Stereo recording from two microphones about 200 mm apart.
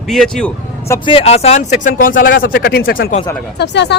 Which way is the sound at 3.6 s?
60° left (ahead or behind).